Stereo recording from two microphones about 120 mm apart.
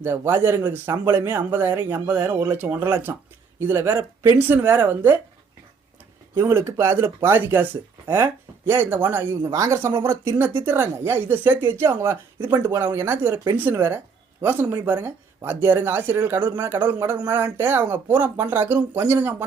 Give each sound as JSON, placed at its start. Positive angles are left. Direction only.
{"t": 0.0, "sound": "speech", "side_deg": -20}
{"t": 6.4, "sound": "speech", "side_deg": -20}